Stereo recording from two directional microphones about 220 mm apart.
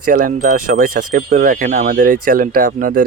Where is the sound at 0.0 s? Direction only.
40° right (ahead or behind).